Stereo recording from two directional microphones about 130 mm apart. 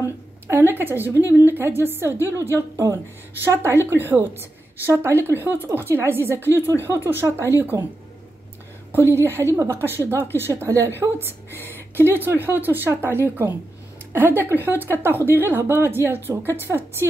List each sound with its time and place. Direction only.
0.5 s speech: 15° right (ahead or behind)
2.1 s a woman's voice: 25° left (ahead or behind)
2.5 s a woman's voice: 20° right (ahead or behind)
9.1 s a woman's voice: 20° right (ahead or behind)
11.5 s speech: 15° left (ahead or behind)
11.9 s speech: 15° right (ahead or behind)